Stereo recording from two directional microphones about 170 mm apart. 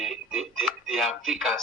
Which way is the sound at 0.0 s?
Centre (ahead or behind).